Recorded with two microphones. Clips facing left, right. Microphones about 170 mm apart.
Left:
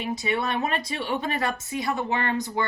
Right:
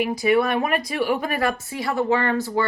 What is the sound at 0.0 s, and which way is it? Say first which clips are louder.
A woman's voice: right 8 dB; 25° left (ahead or behind).